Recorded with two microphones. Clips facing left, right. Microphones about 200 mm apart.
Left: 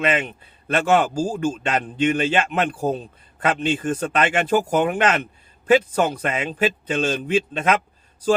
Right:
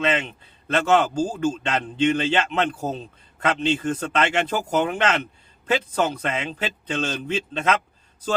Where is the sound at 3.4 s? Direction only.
50° left (ahead or behind).